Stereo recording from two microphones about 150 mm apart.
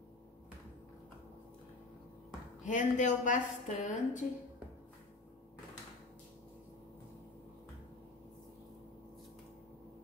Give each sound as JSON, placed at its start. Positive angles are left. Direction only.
{"t": 2.6, "sound": "a woman's voice", "side_deg": 55}